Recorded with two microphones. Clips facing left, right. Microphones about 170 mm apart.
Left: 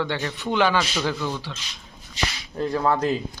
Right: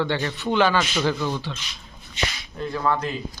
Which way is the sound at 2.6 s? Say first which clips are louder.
Left 3 dB; 40° left (ahead or behind).